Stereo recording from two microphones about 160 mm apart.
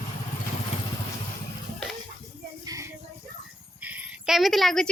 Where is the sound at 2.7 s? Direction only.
20° right (ahead or behind).